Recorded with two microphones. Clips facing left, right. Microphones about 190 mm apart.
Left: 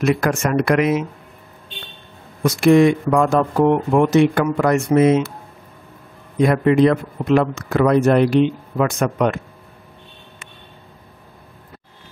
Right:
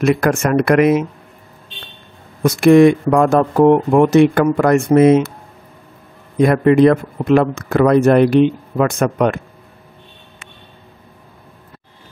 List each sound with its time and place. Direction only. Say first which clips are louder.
0.0 s speech: right 3 dB; 55° right (ahead or behind)
2.4 s speech: right 4 dB; 55° right (ahead or behind)
6.4 s speech: right 3 dB; 55° right (ahead or behind)